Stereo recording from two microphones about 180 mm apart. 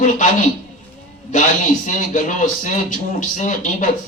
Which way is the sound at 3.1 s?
45° left (ahead or behind).